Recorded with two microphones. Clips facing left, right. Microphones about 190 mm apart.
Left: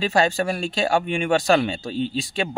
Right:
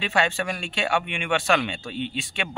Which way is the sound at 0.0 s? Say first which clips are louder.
Left 5 dB; 40° left (ahead or behind).